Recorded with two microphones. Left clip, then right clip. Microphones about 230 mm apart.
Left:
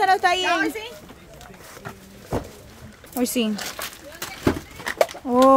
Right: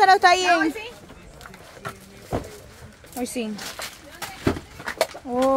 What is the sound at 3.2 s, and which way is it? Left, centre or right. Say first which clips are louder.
Speech: left 5 dB; left.